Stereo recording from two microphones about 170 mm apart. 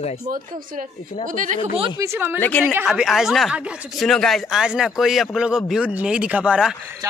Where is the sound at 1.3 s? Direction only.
50° right (ahead or behind).